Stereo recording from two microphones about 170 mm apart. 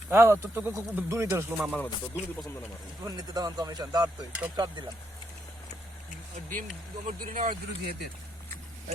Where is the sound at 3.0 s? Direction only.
20° right (ahead or behind).